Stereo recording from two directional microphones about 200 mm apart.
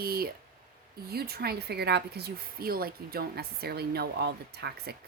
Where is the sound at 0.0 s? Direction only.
50° right (ahead or behind).